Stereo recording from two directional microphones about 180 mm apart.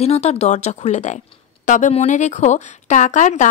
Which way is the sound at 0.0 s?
35° left (ahead or behind).